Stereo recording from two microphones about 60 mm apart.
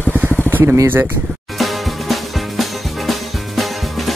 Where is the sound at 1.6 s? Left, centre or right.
Centre.